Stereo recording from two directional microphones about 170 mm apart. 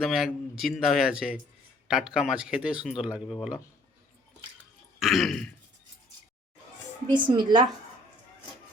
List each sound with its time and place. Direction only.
0.0 s speech: 5° right (ahead or behind)
4.9 s throat clearing: centre (ahead or behind)
7.1 s speech: 25° right (ahead or behind)